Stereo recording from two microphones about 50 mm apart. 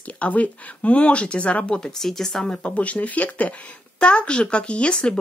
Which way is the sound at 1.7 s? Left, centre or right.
Centre.